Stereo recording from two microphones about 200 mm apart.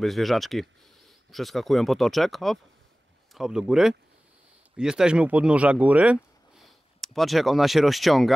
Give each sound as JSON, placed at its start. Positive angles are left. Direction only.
{"t": 0.0, "sound": "speech", "side_deg": 0}